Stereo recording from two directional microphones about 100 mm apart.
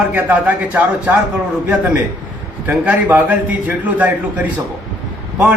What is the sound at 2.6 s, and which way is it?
A man's voice, 15° right (ahead or behind).